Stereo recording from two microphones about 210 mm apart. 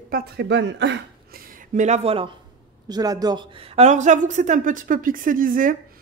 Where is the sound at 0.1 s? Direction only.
50° right (ahead or behind); by 2.2 s 30° right (ahead or behind).